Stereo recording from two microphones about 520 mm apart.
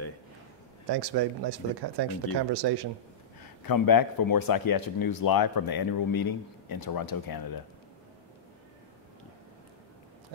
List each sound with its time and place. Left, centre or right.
0.8 s speech: right
3.6 s a man's voice: left